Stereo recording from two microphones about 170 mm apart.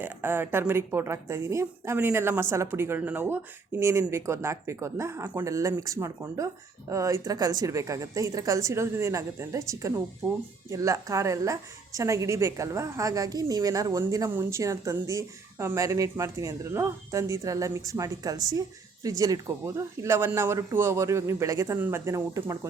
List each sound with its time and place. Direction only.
0.0 s a woman's voice: 10° right (ahead or behind)